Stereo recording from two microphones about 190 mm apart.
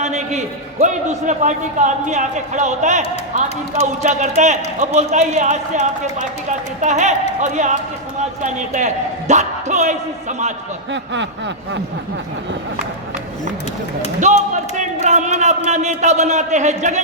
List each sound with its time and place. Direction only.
0.0 s a man's voice: 35° right (ahead or behind)
10.9 s snicker: 70° right (ahead or behind)
14.2 s a man's voice: 40° right (ahead or behind)